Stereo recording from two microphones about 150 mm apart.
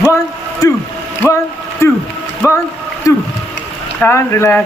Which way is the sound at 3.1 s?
20° left (ahead or behind).